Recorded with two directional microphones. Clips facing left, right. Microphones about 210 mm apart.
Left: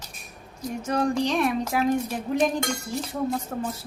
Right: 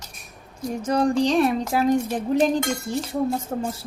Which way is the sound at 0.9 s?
35° right (ahead or behind).